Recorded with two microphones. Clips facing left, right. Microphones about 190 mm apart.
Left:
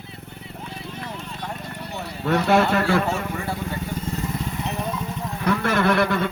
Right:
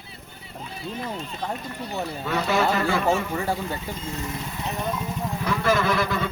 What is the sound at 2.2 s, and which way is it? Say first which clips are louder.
Speech: left 5 dB; 65° left (ahead or behind).